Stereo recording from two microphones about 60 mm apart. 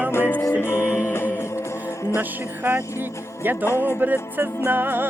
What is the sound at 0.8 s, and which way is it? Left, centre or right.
Music, right.